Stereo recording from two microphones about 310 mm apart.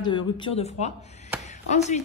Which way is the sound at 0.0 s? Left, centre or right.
Centre.